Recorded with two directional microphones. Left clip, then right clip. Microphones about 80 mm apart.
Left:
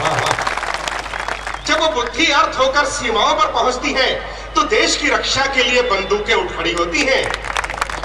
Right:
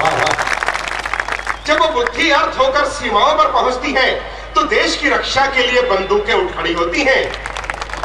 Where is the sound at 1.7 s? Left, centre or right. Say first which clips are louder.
Right 2 dB; left.